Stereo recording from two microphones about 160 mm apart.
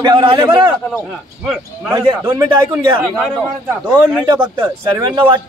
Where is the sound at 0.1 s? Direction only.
30° right (ahead or behind).